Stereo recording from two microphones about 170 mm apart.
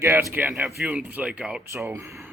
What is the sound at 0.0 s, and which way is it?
Speech, 15° right (ahead or behind).